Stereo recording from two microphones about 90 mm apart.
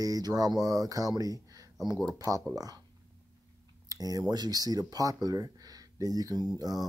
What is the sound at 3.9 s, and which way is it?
Speech, 45° right (ahead or behind).